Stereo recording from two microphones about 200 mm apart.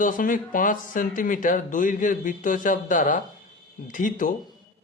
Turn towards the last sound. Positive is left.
turn(degrees=40)  # may be behind; listen again after turning